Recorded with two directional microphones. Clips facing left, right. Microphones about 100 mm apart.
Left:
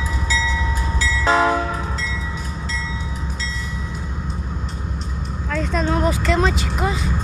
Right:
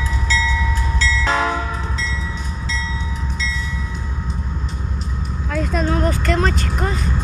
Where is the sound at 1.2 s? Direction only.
30° left (ahead or behind).